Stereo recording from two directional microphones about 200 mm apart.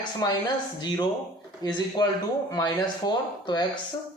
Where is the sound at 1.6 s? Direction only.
20° left (ahead or behind).